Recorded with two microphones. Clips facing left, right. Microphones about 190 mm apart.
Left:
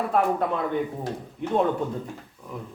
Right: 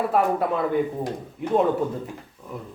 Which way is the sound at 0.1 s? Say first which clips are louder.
Right 1 dB; 5° right (ahead or behind).